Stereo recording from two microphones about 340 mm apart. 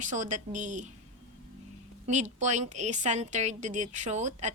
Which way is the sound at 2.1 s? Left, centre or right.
Right.